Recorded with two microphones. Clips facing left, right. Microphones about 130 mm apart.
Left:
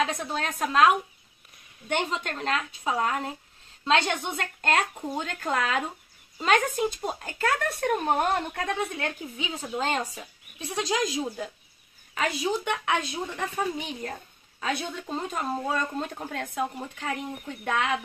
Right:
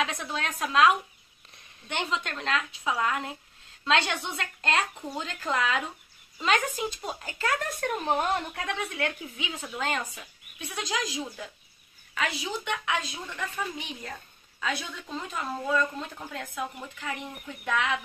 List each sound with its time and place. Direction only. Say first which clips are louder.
0.0 s speech: left 3 dB; 45° left (ahead or behind)
16.6 s speech: left 4 dB; 35° left (ahead or behind)
17.6 s speech: left 1 dB; 45° left (ahead or behind)